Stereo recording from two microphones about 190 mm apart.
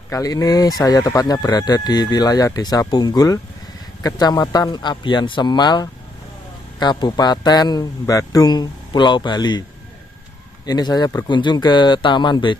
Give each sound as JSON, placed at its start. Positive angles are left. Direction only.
{"t": 0.1, "sound": "speech", "side_deg": 20}